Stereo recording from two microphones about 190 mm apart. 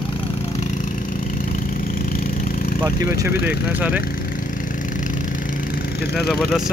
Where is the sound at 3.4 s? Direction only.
5° right (ahead or behind).